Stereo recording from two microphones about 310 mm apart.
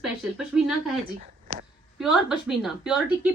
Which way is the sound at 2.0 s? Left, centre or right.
Centre.